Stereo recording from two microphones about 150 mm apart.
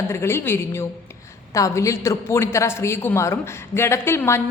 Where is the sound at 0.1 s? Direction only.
15° left (ahead or behind).